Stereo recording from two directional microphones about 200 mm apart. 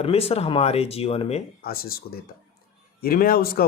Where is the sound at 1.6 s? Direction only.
50° left (ahead or behind).